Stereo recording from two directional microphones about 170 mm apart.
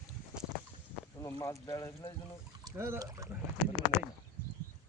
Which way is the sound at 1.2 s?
20° left (ahead or behind).